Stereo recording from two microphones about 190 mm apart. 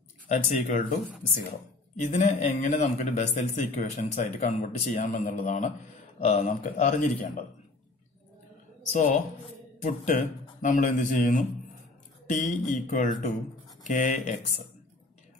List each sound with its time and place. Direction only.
0.3 s a man's voice: 40° left (ahead or behind)
2.0 s a man's voice: 40° left (ahead or behind)
8.9 s a man's voice: 40° left (ahead or behind)